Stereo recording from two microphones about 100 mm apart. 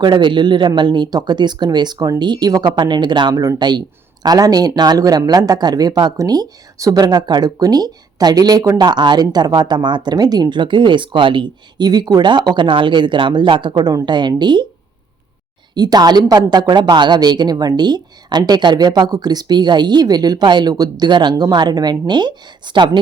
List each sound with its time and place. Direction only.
0.0 s a woman's voice: 50° right (ahead or behind)
8.8 s a woman's voice: 45° right (ahead or behind)
15.7 s a woman's voice: 45° right (ahead or behind)